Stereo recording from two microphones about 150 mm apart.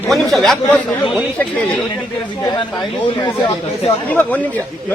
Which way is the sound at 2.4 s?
30° left (ahead or behind).